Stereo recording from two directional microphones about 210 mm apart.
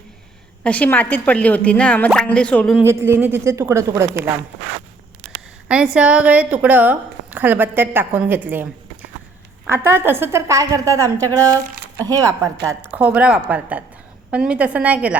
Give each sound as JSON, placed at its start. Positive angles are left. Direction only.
{"t": 0.6, "sound": "speech", "side_deg": 5}
{"t": 2.8, "sound": "a woman's voice", "side_deg": -10}
{"t": 5.6, "sound": "a woman's voice", "side_deg": -5}